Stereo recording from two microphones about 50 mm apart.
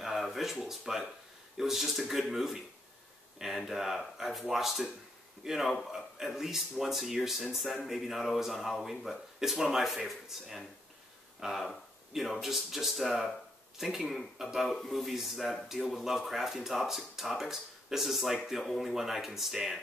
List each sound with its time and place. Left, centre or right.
0.0 s speech: centre